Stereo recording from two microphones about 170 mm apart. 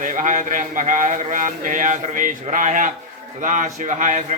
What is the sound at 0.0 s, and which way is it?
Speech, 50° right (ahead or behind).